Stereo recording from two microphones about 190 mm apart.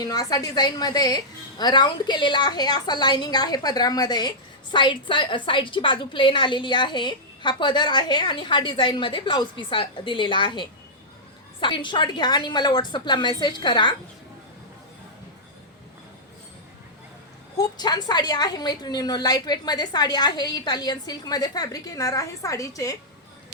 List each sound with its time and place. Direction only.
0.0 s a woman's voice: 20° left (ahead or behind)
17.6 s a woman's voice: 20° left (ahead or behind)